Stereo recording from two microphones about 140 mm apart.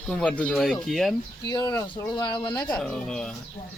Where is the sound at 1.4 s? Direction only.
30° left (ahead or behind).